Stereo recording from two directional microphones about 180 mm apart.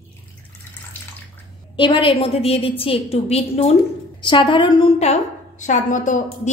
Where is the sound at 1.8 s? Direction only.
25° left (ahead or behind).